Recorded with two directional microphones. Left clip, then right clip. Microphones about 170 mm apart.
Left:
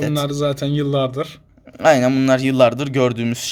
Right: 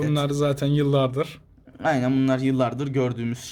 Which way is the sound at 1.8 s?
40° left (ahead or behind).